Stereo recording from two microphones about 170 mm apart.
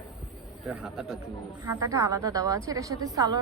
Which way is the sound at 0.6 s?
Centre (ahead or behind).